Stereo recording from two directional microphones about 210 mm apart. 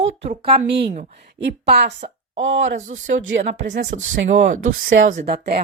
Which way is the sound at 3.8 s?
35° right (ahead or behind).